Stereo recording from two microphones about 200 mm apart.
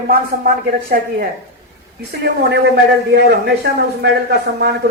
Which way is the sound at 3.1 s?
55° right (ahead or behind).